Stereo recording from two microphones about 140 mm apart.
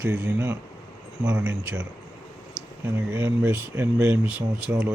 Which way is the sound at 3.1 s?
15° right (ahead or behind).